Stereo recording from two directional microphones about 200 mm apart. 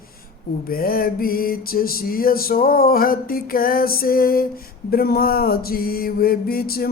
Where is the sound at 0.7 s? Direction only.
45° left (ahead or behind).